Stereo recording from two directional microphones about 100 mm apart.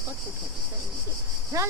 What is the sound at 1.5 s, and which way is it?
Speech, 30° right (ahead or behind).